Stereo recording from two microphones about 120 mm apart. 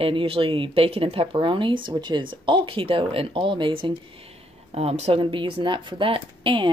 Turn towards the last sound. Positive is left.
turn(degrees=-45)  # may be behind; listen again after turning